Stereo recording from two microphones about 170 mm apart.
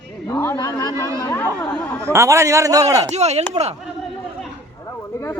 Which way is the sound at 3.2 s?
40° right (ahead or behind).